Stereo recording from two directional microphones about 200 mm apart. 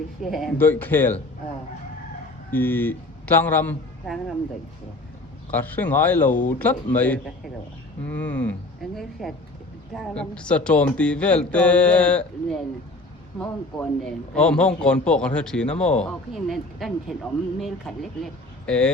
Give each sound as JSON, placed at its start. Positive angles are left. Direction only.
{"t": 0.2, "sound": "speech", "side_deg": 0}
{"t": 2.5, "sound": "a man's voice", "side_deg": 10}
{"t": 5.5, "sound": "a man's voice", "side_deg": 10}